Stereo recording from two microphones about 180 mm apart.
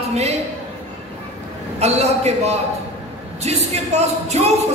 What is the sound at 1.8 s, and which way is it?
Speech, 35° right (ahead or behind).